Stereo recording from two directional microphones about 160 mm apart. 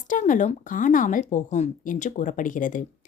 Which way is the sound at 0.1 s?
55° left (ahead or behind).